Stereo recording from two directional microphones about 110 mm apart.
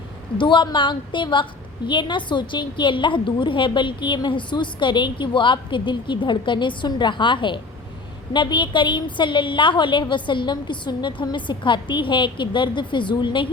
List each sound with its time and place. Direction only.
0.3 s a woman's voice: 45° left (ahead or behind)